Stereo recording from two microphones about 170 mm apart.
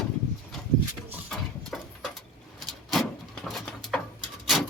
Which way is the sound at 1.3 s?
Centre (ahead or behind).